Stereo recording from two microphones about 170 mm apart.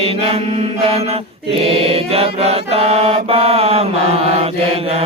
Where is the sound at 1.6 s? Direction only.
35° right (ahead or behind).